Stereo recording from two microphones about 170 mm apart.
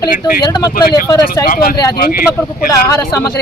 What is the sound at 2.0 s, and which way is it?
Speech, 60° left (ahead or behind).